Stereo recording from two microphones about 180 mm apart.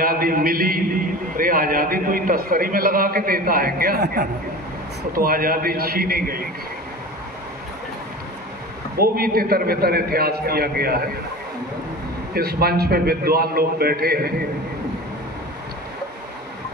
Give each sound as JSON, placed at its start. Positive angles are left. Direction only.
{"t": 0.0, "sound": "a man's voice", "side_deg": -55}
{"t": 8.9, "sound": "a man's voice", "side_deg": -55}
{"t": 12.4, "sound": "a man's voice", "side_deg": -60}